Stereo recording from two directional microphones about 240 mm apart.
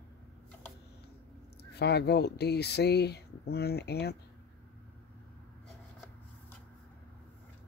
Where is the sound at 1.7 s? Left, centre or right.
Left.